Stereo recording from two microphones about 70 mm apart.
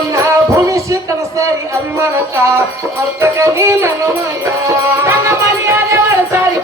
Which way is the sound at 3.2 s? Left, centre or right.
Right.